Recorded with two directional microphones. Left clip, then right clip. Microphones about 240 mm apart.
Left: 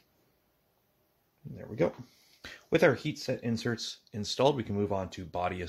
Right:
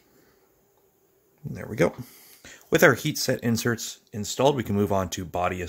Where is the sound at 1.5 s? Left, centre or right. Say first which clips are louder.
Right 6 dB; right.